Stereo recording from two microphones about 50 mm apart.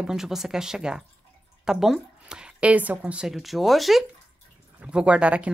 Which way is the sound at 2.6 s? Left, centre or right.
Right.